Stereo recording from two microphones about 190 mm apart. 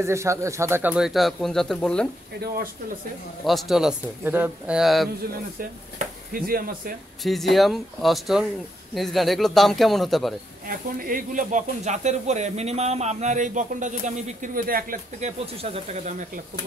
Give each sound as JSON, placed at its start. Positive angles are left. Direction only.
{"t": 0.0, "sound": "speech", "side_deg": -15}
{"t": 2.4, "sound": "speech", "side_deg": -50}
{"t": 3.4, "sound": "speech", "side_deg": 0}
{"t": 5.6, "sound": "speech", "side_deg": -50}
{"t": 7.2, "sound": "speech", "side_deg": 0}
{"t": 10.7, "sound": "speech", "side_deg": -50}